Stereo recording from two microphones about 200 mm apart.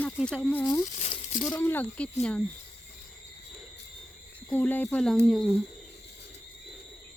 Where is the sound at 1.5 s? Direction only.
10° left (ahead or behind).